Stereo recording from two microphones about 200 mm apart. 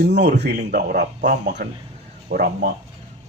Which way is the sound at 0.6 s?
45° right (ahead or behind).